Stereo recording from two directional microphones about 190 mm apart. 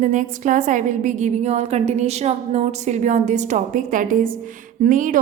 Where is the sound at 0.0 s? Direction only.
40° right (ahead or behind).